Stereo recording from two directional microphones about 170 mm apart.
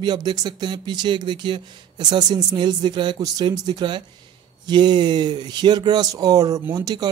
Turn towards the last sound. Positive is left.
turn(degrees=-20)  # may be behind; listen again after turning